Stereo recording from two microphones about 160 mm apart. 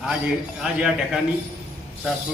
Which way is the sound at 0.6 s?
5° right (ahead or behind).